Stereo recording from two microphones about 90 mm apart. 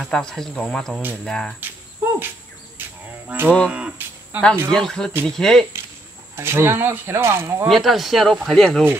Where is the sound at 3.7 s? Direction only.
15° right (ahead or behind).